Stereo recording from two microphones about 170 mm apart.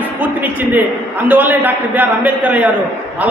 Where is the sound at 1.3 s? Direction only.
10° right (ahead or behind).